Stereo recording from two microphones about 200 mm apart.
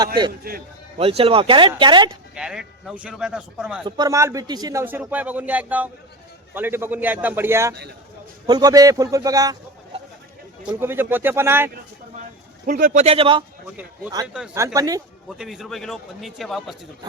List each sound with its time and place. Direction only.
0.4 s a man's voice: 50° right (ahead or behind)
0.9 s speech: 30° right (ahead or behind)
2.3 s a man's voice: 5° right (ahead or behind)
3.8 s speech: 20° right (ahead or behind)
10.8 s speech: 10° right (ahead or behind)
12.6 s speech: 40° right (ahead or behind); by 13.4 s 25° right (ahead or behind)
14.5 s speech: 15° right (ahead or behind)
15.4 s a man's voice: centre (ahead or behind)